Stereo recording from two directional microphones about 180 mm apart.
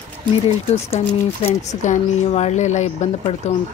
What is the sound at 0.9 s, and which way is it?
Speech, 35° left (ahead or behind).